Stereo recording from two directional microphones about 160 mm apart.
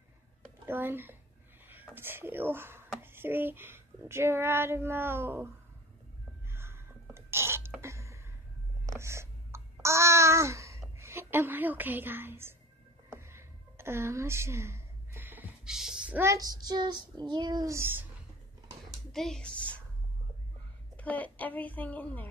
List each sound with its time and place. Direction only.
0.7 s a child's voice: 15° right (ahead or behind)
6.5 s a sound: 15° right (ahead or behind)
8.8 s babbling: 20° right (ahead or behind)
13.1 s a sound: 15° right (ahead or behind)
16.2 s child singing: 20° right (ahead or behind)
19.1 s a woman's voice: 5° left (ahead or behind)
20.9 s a woman's voice: 10° left (ahead or behind)